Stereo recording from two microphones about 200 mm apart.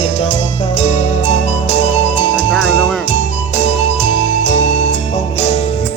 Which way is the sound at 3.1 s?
35° left (ahead or behind).